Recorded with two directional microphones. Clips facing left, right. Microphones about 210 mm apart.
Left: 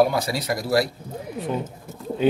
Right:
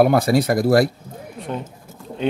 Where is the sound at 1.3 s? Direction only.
Centre (ahead or behind).